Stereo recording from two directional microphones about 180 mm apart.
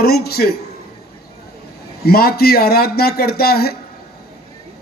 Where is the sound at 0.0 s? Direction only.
60° left (ahead or behind).